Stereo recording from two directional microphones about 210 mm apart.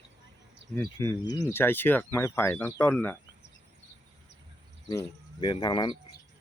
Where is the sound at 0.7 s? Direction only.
10° left (ahead or behind).